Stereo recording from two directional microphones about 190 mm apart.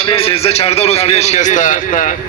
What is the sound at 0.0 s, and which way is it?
A man's voice, 30° left (ahead or behind).